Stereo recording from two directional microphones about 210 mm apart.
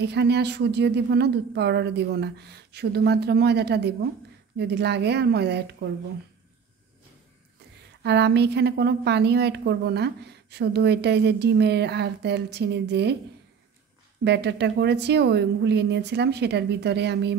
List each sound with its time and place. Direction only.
0.0 s a woman's voice: 55° right (ahead or behind)
8.0 s a woman's voice: 55° right (ahead or behind)
14.2 s a woman's voice: 55° right (ahead or behind)